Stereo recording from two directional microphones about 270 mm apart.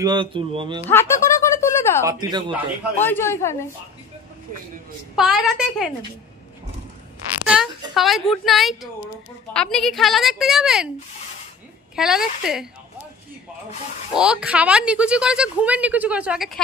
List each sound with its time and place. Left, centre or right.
0.0 s speech: centre
0.8 s a sound: centre
2.0 s speech: centre
3.0 s speech: centre
5.1 s a woman's voice: centre
7.4 s a woman's voice: centre
11.9 s a woman's voice: centre
14.1 s a woman's voice: centre